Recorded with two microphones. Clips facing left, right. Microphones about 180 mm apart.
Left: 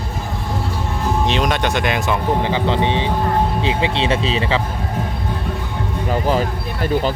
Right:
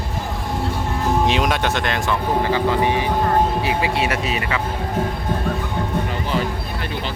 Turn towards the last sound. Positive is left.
turn(degrees=40)  # may be behind; listen again after turning